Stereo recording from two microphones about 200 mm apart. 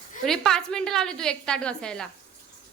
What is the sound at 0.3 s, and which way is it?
A woman's voice, 5° left (ahead or behind).